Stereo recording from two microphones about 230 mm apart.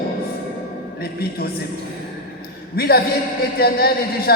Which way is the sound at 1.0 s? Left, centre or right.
Left.